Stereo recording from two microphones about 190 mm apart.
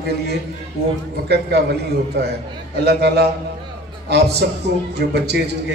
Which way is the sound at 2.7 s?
60° right (ahead or behind).